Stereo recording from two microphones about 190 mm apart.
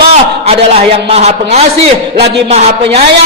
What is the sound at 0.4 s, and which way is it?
A man's voice, 30° right (ahead or behind).